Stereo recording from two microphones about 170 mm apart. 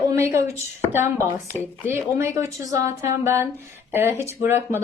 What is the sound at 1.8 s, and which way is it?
Speech, 15° right (ahead or behind).